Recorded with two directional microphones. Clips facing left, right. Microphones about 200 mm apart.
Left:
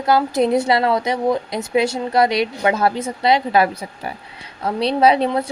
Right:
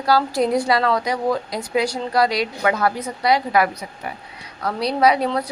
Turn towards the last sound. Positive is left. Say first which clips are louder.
# left 2 dB
turn(degrees=25)  # may be behind; listen again after turning